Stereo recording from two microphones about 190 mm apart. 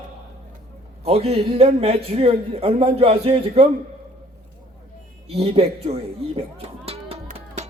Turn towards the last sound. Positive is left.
turn(degrees=-30)  # may be behind; listen again after turning